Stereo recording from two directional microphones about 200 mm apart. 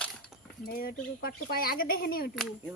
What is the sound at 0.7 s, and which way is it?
Speech, 50° left (ahead or behind).